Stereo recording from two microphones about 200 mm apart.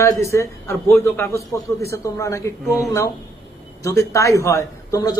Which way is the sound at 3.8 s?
15° left (ahead or behind).